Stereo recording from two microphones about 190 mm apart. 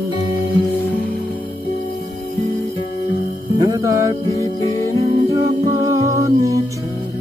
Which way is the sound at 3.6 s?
15° right (ahead or behind).